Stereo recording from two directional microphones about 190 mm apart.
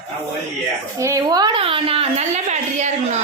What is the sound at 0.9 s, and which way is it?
A woman's voice, 15° right (ahead or behind).